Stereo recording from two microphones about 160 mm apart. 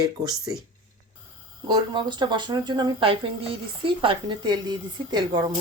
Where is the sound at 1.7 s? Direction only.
30° right (ahead or behind).